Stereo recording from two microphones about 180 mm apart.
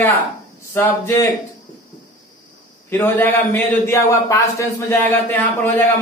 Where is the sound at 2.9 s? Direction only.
10° left (ahead or behind).